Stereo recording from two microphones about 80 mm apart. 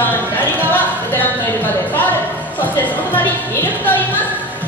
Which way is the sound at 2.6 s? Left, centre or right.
Left.